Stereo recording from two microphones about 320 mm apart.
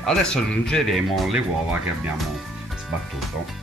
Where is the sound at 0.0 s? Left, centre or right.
Centre.